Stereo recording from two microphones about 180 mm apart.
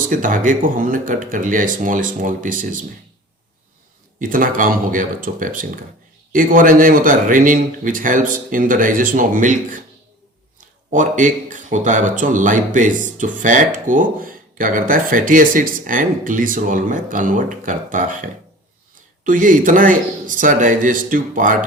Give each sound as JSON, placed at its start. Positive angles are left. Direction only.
{"t": 0.0, "sound": "speech", "side_deg": -50}
{"t": 4.2, "sound": "speech", "side_deg": -50}
{"t": 10.9, "sound": "speech", "side_deg": -45}